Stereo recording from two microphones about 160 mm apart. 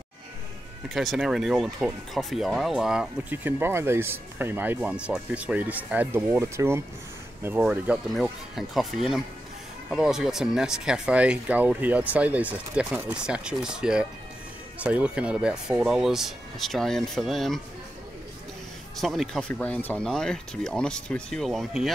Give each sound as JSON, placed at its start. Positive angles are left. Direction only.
{"t": 0.8, "sound": "speech", "side_deg": 0}
{"t": 18.9, "sound": "speech", "side_deg": 0}